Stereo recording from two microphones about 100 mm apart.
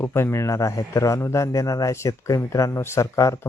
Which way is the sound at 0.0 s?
25° left (ahead or behind).